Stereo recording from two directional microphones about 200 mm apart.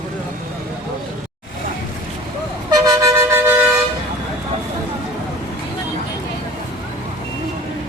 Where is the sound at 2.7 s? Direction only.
15° right (ahead or behind).